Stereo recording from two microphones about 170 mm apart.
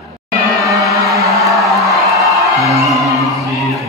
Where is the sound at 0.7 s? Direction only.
Centre (ahead or behind).